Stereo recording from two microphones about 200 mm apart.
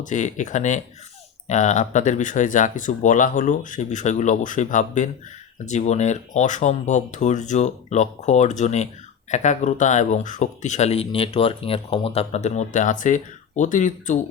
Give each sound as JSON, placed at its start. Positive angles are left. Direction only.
{"t": 0.0, "sound": "speech", "side_deg": 40}